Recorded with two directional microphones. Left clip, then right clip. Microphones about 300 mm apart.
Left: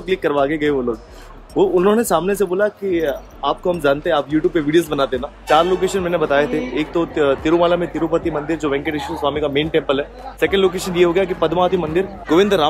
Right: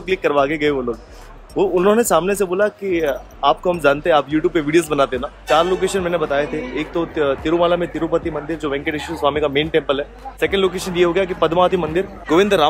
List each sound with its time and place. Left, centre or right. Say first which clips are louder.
0.0 s speech: right 1 dB; centre